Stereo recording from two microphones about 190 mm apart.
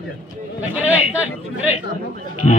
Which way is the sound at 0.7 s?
10° right (ahead or behind).